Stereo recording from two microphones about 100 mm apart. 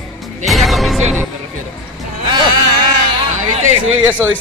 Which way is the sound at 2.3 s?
50° right (ahead or behind).